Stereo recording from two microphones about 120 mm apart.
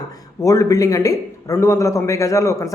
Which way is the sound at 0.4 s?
30° left (ahead or behind).